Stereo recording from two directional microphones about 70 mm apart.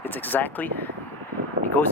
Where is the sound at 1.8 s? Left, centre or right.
Left.